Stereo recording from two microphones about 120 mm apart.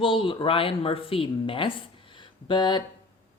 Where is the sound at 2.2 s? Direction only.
40° left (ahead or behind).